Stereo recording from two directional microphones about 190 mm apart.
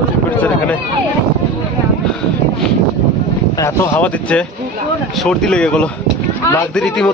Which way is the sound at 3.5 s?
15° left (ahead or behind).